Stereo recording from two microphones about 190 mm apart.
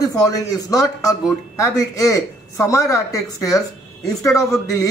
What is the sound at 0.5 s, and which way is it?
A man's voice, 20° left (ahead or behind).